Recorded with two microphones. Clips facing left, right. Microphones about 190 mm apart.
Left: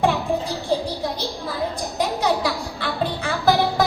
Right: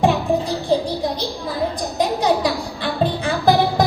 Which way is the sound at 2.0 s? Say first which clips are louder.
Right 3 dB; 15° right (ahead or behind).